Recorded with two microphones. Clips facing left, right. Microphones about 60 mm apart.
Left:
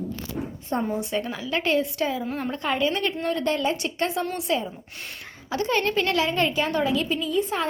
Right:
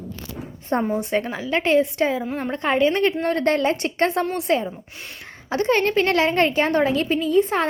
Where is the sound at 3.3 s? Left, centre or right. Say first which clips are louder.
Right 5 dB; right.